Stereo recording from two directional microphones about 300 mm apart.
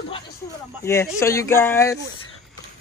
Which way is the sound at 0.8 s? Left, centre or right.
Centre.